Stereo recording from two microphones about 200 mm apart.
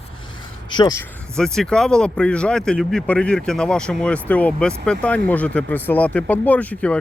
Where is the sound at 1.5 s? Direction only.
5° left (ahead or behind).